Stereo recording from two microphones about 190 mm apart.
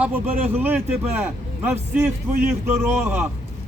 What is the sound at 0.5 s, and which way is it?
Speech, 10° right (ahead or behind).